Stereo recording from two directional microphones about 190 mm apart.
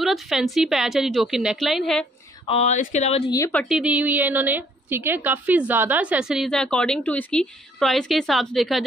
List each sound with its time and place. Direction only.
0.0 s a woman's voice: centre (ahead or behind)
2.4 s speech: 35° left (ahead or behind)
3.3 s a woman's voice: 15° left (ahead or behind)
3.6 s a woman's voice: 5° right (ahead or behind)